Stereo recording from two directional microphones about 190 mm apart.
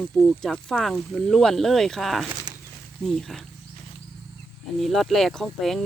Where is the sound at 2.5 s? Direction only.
20° right (ahead or behind).